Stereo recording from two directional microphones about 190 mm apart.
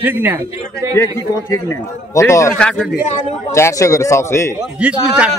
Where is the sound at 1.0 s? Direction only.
15° left (ahead or behind).